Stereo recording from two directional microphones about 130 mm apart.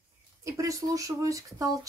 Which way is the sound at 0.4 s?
25° right (ahead or behind).